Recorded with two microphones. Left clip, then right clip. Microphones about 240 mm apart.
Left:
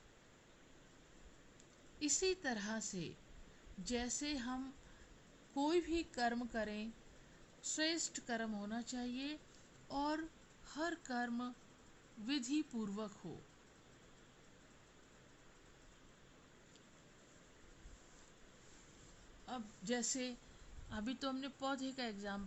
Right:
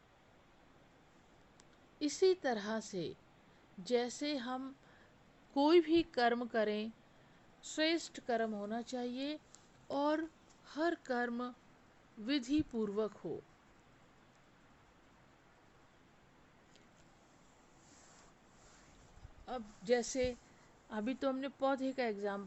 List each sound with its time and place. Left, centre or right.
2.0 s a woman's voice: centre
19.5 s a woman's voice: centre
20.9 s a woman's voice: centre